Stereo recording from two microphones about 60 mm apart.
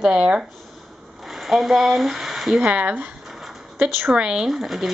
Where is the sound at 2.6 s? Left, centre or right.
Right.